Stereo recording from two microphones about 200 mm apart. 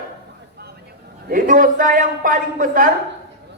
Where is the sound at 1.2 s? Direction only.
45° right (ahead or behind).